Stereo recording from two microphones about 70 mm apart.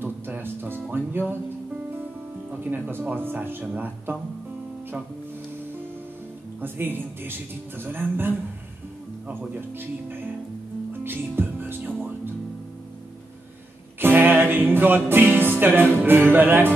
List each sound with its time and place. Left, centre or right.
0.0 s music: right
2.6 s speech: right
6.6 s speech: right
10.9 s music: right
13.9 s music: right
15.6 s speech: right